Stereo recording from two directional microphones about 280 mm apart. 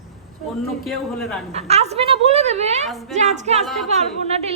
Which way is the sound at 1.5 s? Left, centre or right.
Right.